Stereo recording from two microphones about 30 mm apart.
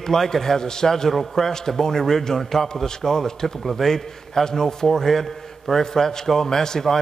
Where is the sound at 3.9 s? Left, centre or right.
Centre.